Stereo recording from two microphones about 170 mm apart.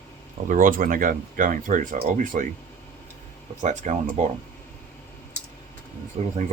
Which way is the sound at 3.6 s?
45° right (ahead or behind).